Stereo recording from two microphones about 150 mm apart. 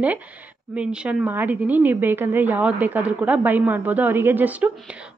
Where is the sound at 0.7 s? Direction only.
5° right (ahead or behind).